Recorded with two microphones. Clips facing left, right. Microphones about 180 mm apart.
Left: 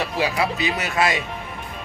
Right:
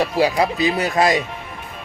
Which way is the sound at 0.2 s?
35° right (ahead or behind).